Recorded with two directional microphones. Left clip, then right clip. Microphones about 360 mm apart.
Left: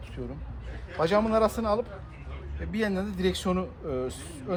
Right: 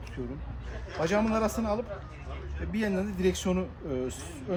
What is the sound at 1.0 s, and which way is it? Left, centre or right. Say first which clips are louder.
A man's voice: left 4 dB; centre.